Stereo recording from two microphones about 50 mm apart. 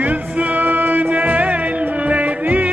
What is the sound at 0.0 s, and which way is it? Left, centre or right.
Music, right.